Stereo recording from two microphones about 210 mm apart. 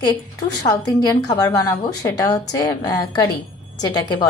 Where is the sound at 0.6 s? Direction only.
20° left (ahead or behind).